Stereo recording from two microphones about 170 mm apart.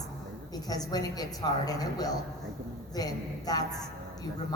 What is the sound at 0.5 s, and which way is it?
A woman's voice, 20° left (ahead or behind).